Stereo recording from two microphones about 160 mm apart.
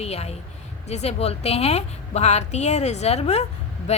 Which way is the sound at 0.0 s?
40° left (ahead or behind).